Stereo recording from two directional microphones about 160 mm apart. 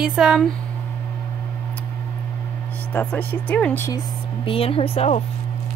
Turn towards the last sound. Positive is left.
turn(degrees=40)  # may be behind; listen again after turning